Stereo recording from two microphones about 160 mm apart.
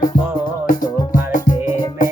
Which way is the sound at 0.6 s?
60° left (ahead or behind).